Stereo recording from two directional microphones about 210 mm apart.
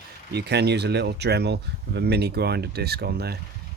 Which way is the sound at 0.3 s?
50° right (ahead or behind).